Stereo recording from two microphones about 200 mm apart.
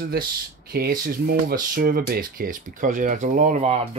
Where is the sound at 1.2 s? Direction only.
45° right (ahead or behind).